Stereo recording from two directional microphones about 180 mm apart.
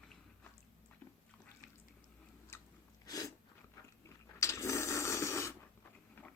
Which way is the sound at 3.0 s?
20° left (ahead or behind).